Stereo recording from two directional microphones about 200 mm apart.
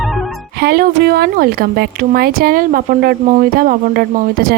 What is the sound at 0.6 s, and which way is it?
Speech, 50° right (ahead or behind).